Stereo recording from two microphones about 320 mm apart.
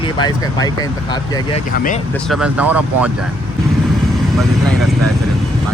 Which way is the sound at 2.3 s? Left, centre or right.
Centre.